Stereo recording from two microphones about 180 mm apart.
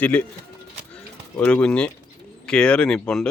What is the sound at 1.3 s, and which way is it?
Speech, 5° left (ahead or behind).